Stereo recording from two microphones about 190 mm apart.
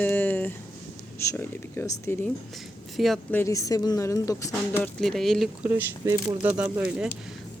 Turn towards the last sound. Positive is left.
turn(degrees=-5)  # may be behind; listen again after turning